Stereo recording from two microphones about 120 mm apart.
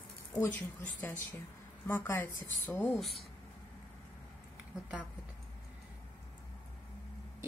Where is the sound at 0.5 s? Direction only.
15° left (ahead or behind).